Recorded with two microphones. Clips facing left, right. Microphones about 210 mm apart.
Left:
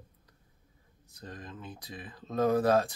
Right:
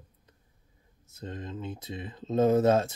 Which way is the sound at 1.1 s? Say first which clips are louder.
Right 6 dB; 25° right (ahead or behind).